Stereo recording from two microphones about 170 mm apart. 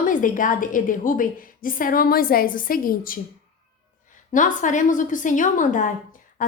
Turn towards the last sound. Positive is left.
turn(degrees=50)  # may be behind; listen again after turning